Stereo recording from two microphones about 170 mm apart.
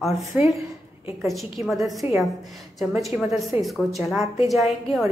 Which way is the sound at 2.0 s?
10° right (ahead or behind).